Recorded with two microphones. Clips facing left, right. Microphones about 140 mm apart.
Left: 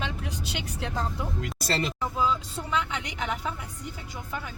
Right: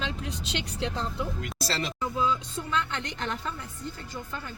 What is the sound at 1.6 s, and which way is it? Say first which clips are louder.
Speech: left 3 dB; 50° left (ahead or behind).